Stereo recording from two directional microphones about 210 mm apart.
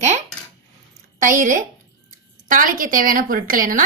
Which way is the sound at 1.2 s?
40° right (ahead or behind).